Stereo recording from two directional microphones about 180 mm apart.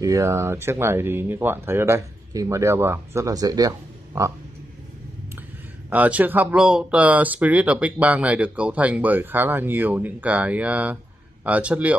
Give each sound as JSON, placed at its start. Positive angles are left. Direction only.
{"t": 0.0, "sound": "speech", "side_deg": -15}
{"t": 5.9, "sound": "speech", "side_deg": -10}